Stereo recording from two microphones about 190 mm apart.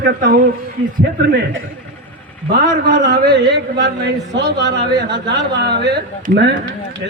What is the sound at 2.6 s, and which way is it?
A man's voice, 45° right (ahead or behind).